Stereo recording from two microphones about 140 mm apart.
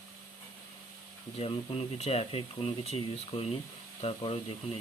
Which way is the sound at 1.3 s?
45° left (ahead or behind).